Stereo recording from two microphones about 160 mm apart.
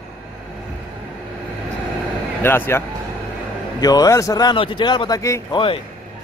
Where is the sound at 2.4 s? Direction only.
15° left (ahead or behind).